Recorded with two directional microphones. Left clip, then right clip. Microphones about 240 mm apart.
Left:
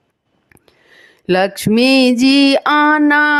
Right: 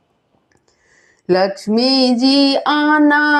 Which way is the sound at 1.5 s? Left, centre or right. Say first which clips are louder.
Left 3 dB; left.